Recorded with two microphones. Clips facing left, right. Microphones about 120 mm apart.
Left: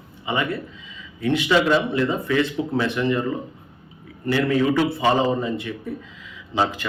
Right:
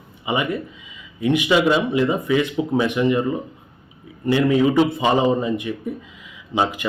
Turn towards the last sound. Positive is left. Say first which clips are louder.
# right 1 dB
turn(degrees=-15)  # may be behind; listen again after turning